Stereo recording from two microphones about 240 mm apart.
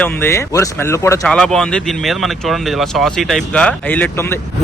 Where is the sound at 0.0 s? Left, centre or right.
Centre.